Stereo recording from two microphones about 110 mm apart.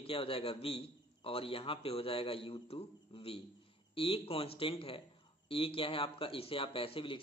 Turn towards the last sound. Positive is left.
turn(degrees=55)  # may be behind; listen again after turning